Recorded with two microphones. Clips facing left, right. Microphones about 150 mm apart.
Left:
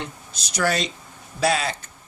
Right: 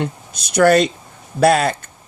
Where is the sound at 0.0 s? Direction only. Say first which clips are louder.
Right 10 dB; 55° right (ahead or behind).